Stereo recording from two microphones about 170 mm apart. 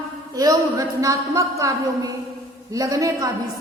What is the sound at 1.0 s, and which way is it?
A woman's voice, 20° right (ahead or behind).